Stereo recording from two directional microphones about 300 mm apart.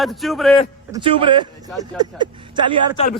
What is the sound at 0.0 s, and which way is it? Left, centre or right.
Speech, centre.